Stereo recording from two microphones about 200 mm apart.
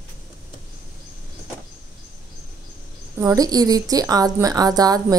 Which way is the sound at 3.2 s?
15° right (ahead or behind).